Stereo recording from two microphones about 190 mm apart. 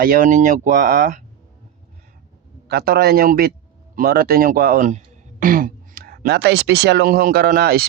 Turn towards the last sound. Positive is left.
turn(degrees=-55)  # may be behind; listen again after turning